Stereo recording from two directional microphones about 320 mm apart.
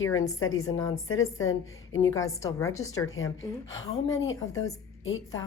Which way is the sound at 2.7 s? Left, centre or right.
Left.